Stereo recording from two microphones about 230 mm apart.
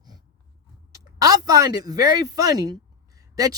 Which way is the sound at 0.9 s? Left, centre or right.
Centre.